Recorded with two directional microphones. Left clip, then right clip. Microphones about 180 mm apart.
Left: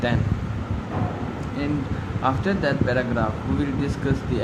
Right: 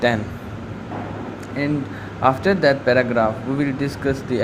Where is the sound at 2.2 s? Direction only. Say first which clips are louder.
Right 7 dB; 35° right (ahead or behind).